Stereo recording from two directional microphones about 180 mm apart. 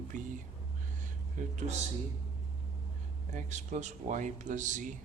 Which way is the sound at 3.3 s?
40° right (ahead or behind).